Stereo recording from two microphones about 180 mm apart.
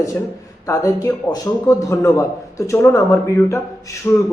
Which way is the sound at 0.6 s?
15° left (ahead or behind).